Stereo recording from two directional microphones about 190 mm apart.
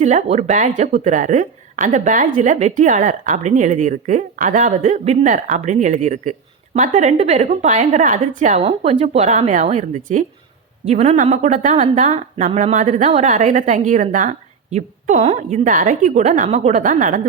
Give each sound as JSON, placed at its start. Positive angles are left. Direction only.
{"t": 0.0, "sound": "a woman's voice", "side_deg": -35}